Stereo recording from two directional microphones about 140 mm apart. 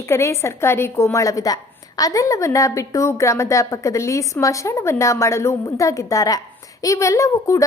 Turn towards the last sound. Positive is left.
turn(degrees=20)  # may be behind; listen again after turning